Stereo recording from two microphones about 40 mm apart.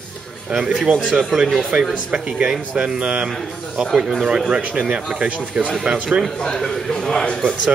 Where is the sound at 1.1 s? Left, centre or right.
Centre.